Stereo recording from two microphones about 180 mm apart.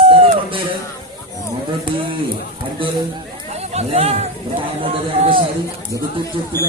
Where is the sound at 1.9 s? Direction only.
50° left (ahead or behind).